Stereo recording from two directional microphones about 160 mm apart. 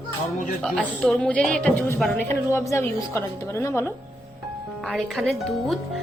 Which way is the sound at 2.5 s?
15° left (ahead or behind).